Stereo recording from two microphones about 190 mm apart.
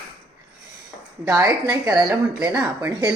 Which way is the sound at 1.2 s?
15° right (ahead or behind).